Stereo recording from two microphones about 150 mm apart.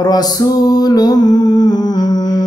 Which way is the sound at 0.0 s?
25° left (ahead or behind).